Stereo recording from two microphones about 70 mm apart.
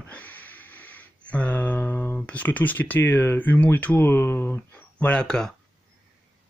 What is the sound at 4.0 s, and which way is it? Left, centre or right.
Speech, left.